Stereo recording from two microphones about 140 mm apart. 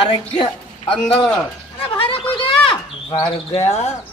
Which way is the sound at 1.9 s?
40° left (ahead or behind).